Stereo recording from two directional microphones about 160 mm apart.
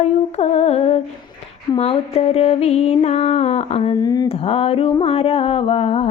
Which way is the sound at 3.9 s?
25° left (ahead or behind).